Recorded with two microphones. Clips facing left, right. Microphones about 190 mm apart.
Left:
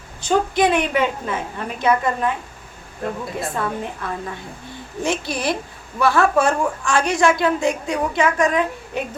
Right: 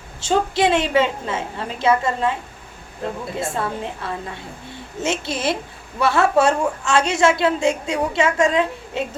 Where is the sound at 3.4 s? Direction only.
25° right (ahead or behind).